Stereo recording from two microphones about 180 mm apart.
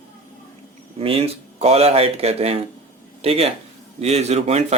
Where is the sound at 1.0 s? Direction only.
30° right (ahead or behind).